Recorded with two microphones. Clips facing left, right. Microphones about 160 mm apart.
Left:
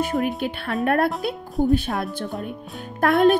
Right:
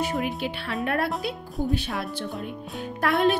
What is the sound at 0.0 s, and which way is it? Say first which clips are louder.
A woman's voice: left 4 dB; 45° left (ahead or behind).